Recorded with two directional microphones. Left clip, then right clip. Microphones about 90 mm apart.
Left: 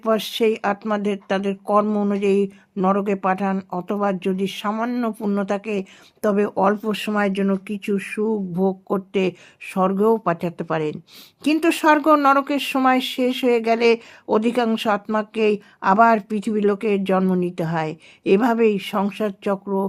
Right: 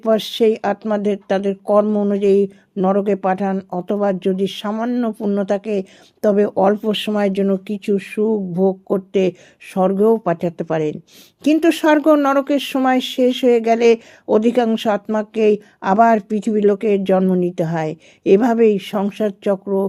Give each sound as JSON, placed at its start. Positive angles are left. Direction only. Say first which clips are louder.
{"t": 0.0, "sound": "speech", "louder": "right 4 dB", "side_deg": -35}
{"t": 2.1, "sound": "speech", "louder": "right 6 dB", "side_deg": -35}
{"t": 5.5, "sound": "speech", "louder": "right 4 dB", "side_deg": -35}
{"t": 17.2, "sound": "speech", "louder": "right 4 dB", "side_deg": -20}
{"t": 17.5, "sound": "speech", "louder": "right 3 dB", "side_deg": -35}